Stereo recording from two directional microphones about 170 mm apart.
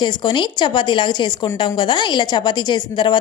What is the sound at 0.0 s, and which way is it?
A woman's voice, 25° left (ahead or behind).